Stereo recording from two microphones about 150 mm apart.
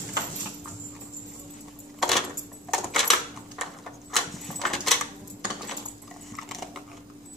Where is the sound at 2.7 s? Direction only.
Centre (ahead or behind).